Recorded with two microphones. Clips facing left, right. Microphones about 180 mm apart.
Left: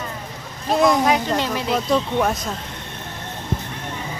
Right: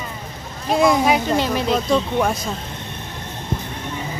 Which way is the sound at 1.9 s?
Centre (ahead or behind).